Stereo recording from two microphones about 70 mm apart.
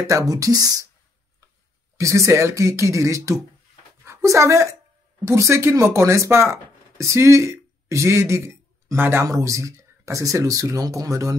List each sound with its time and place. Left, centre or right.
0.1 s speech: right
2.0 s speech: right